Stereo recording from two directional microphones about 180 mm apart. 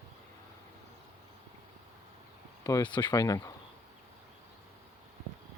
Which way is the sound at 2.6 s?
20° left (ahead or behind).